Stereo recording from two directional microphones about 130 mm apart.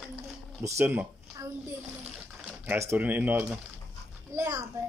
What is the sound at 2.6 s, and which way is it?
Speech, 15° right (ahead or behind).